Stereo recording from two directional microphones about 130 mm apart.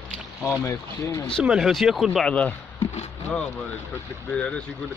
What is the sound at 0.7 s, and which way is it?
Speech, 25° left (ahead or behind).